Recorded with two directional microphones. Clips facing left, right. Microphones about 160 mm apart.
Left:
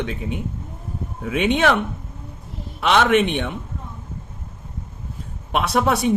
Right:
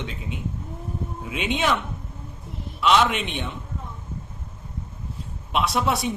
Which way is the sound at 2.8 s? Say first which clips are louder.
Left 4 dB; 55° left (ahead or behind).